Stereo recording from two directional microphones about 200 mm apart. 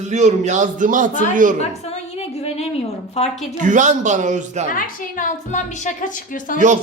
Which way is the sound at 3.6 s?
40° right (ahead or behind).